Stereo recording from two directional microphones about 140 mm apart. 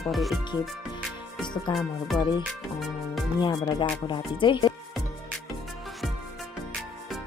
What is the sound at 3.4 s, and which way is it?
Speech, 35° left (ahead or behind).